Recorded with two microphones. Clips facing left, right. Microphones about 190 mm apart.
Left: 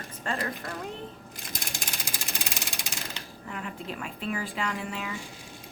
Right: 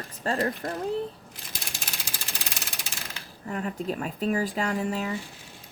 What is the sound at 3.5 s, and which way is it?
Speech, 40° right (ahead or behind).